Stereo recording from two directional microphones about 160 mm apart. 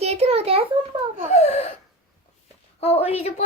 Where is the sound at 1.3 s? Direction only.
45° left (ahead or behind).